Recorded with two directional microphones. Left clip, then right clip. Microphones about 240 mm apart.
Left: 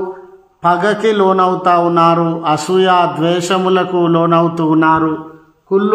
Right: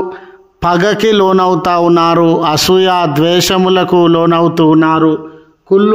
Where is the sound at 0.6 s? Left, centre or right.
Right.